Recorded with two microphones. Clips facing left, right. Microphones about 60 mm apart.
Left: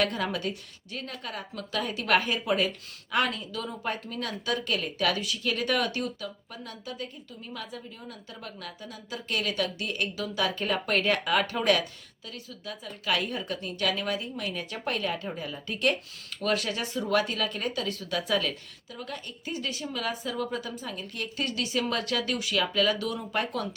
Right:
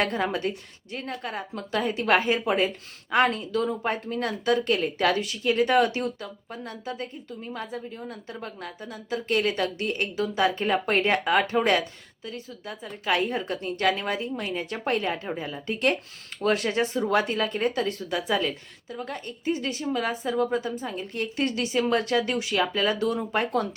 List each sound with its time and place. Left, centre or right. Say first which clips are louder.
0.0 s a woman's voice: right 3 dB; right
5.4 s speech: right 9 dB; right
18.9 s a woman's voice: right 4 dB; right